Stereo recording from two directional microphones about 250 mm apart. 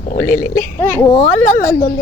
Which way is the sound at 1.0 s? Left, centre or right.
Centre.